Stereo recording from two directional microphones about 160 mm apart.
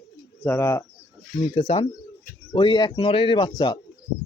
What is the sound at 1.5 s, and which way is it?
Speech, 35° left (ahead or behind).